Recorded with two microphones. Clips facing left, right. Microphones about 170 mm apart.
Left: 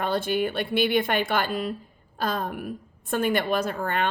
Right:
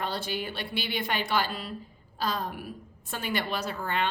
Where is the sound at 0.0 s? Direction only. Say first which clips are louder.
Left 8 dB; 50° left (ahead or behind).